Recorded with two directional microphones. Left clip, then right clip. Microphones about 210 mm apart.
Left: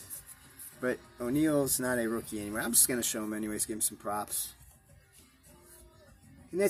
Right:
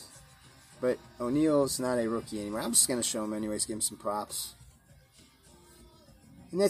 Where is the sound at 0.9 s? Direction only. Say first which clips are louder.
Right 2 dB; centre (ahead or behind).